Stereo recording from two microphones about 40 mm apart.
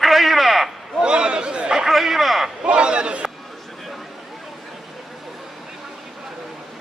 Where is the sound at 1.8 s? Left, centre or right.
Centre.